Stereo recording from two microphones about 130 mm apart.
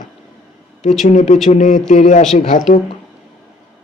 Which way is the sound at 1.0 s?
65° left (ahead or behind).